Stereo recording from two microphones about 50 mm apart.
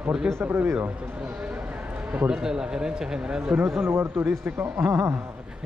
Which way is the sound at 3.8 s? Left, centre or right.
Right.